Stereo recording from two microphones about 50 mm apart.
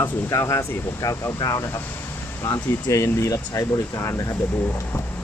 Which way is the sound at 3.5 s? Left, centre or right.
Left.